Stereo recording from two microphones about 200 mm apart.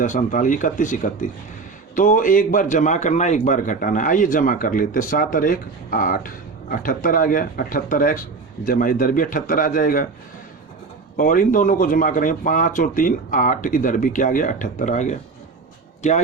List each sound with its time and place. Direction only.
0.0 s a man's voice: 40° left (ahead or behind)
11.2 s speech: 40° left (ahead or behind)